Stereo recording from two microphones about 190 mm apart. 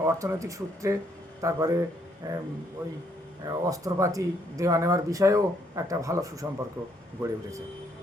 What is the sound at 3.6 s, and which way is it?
Speech, 15° right (ahead or behind).